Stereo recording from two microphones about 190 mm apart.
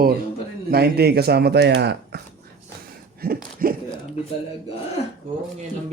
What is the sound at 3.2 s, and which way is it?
Speech, 50° right (ahead or behind).